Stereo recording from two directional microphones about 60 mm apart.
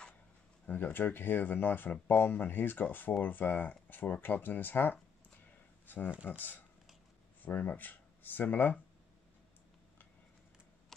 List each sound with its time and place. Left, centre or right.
0.7 s speech: left
10.9 s tick-tock: centre